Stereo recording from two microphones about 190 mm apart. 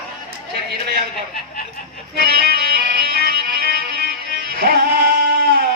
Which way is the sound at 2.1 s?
55° right (ahead or behind).